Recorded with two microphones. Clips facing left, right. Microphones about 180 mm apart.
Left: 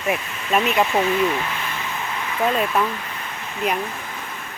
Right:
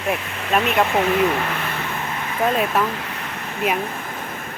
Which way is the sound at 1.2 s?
55° right (ahead or behind).